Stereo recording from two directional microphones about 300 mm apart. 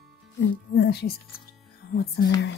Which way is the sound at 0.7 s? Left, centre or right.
Left.